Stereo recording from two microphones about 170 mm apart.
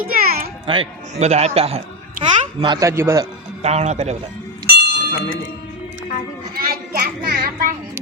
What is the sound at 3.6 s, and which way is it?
Speech, 40° right (ahead or behind).